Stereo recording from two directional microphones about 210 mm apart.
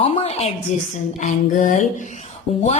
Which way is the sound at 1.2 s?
40° left (ahead or behind).